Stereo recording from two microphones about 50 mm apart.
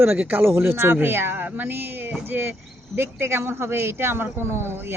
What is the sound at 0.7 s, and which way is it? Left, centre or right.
Speech, right.